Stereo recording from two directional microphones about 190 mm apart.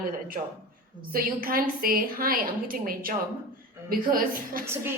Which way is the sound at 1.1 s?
50° right (ahead or behind).